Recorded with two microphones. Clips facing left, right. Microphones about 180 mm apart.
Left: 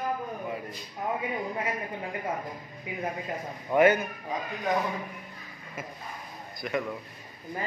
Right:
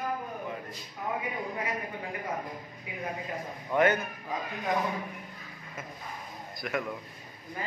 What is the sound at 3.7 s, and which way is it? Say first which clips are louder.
Speech: left 4 dB; 10° left (ahead or behind).